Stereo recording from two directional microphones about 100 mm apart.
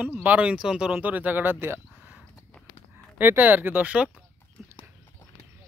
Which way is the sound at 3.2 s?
20° right (ahead or behind).